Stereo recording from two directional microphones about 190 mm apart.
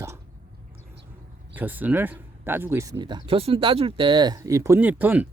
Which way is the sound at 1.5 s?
10° right (ahead or behind).